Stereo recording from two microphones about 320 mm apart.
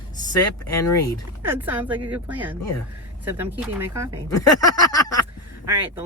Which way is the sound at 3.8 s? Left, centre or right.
Centre.